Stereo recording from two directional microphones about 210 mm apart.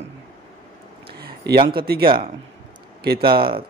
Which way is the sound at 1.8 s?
50° right (ahead or behind).